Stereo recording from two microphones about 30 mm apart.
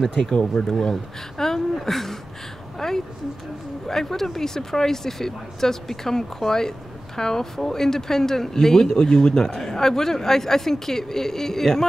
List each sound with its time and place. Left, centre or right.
0.2 s speech: left
1.4 s a sound: centre
3.8 s speech: centre